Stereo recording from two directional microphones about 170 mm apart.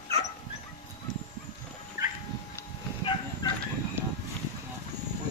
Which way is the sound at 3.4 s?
25° left (ahead or behind).